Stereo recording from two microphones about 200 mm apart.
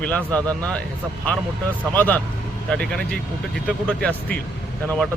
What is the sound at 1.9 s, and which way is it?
Speech, 10° left (ahead or behind).